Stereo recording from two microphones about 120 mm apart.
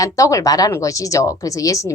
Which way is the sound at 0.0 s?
25° left (ahead or behind).